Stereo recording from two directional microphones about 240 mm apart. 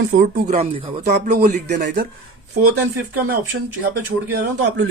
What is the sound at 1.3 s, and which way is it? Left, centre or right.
Speech, right.